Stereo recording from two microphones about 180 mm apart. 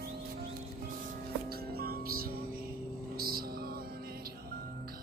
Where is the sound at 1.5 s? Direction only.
55° right (ahead or behind).